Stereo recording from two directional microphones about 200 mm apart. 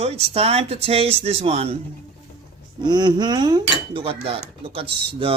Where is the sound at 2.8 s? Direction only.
20° right (ahead or behind).